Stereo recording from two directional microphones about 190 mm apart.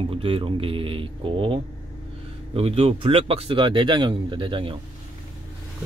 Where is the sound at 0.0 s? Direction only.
30° right (ahead or behind).